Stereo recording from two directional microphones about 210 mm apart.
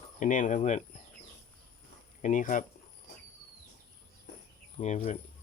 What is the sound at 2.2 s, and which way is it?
Speech, 40° left (ahead or behind).